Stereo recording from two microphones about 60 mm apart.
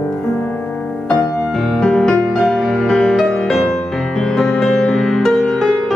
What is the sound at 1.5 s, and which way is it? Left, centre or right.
Music, centre.